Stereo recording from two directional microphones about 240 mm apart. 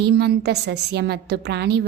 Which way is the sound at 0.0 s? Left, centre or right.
Right.